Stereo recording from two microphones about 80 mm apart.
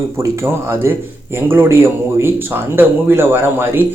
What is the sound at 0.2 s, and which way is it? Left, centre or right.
A man's voice, right.